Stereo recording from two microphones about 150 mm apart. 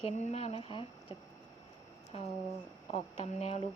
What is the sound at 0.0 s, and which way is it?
Speech, 45° left (ahead or behind).